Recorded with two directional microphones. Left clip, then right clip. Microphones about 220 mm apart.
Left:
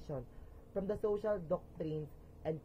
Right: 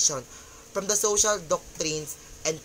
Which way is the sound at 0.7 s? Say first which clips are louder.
Right 12 dB; 70° right (ahead or behind).